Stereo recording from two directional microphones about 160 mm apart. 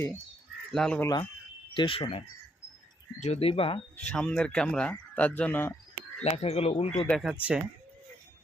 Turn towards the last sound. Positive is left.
turn(degrees=0)  # may be behind; listen again after turning